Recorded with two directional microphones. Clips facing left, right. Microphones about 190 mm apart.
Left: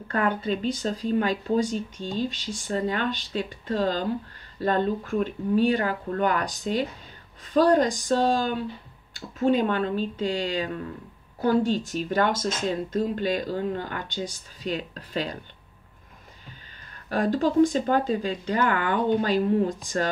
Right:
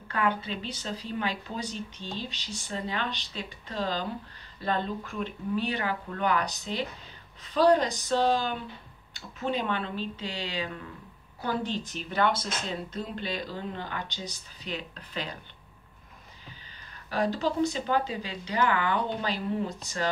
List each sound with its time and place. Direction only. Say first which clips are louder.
0.1 s speech: left 4 dB; 45° left (ahead or behind)
17.1 s speech: left 5 dB; 50° left (ahead or behind)